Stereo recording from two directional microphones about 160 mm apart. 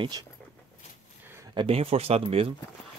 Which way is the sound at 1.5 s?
35° right (ahead or behind).